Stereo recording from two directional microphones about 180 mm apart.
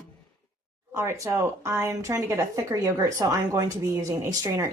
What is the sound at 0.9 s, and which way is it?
Speech, 15° right (ahead or behind).